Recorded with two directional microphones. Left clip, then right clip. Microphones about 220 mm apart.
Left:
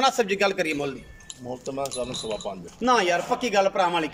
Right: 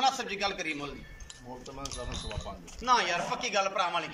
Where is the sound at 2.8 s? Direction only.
35° left (ahead or behind).